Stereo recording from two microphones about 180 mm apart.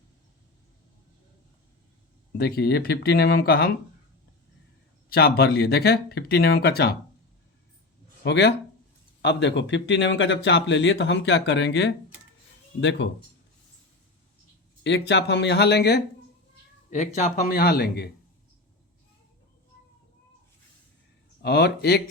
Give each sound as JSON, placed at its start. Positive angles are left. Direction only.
{"t": 2.4, "sound": "speech", "side_deg": 60}
{"t": 5.0, "sound": "speech", "side_deg": 60}
{"t": 8.2, "sound": "speech", "side_deg": 70}
{"t": 12.8, "sound": "speech", "side_deg": 90}
{"t": 14.8, "sound": "speech", "side_deg": 70}
{"t": 16.9, "sound": "speech", "side_deg": 40}
{"t": 17.5, "sound": "speech", "side_deg": 60}
{"t": 21.4, "sound": "speech", "side_deg": 65}